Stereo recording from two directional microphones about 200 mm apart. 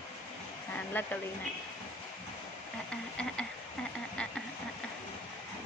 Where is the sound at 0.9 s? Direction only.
10° left (ahead or behind).